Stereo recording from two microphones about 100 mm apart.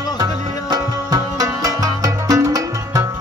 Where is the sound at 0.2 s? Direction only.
40° right (ahead or behind).